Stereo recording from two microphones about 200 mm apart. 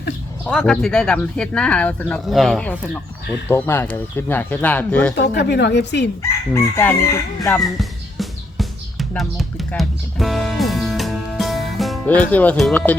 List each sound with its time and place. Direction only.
0.4 s speech: 5° left (ahead or behind)
5.1 s a woman's voice: 60° left (ahead or behind)
6.5 s speech: 10° left (ahead or behind)
7.6 s music: centre (ahead or behind)
12.3 s speech: 5° left (ahead or behind)